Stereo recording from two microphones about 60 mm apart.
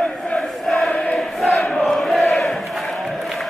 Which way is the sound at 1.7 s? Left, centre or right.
Centre.